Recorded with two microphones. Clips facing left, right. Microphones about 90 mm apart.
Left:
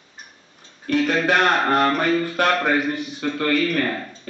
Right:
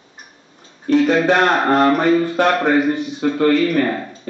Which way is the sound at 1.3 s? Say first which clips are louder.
Right 4 dB; 25° right (ahead or behind).